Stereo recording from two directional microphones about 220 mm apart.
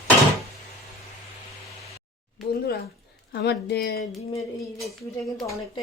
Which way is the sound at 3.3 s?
50° left (ahead or behind).